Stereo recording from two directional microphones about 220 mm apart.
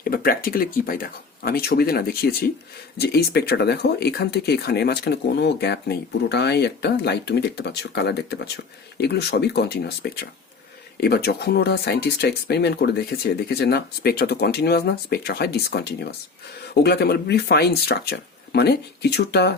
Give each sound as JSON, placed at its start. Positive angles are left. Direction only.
{"t": 0.1, "sound": "speech", "side_deg": 40}